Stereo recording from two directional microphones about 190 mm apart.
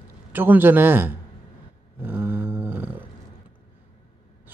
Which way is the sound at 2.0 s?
10° right (ahead or behind).